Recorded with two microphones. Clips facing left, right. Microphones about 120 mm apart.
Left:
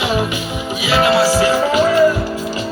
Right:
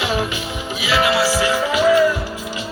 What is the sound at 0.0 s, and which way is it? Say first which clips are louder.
Music: left 3 dB; 20° left (ahead or behind).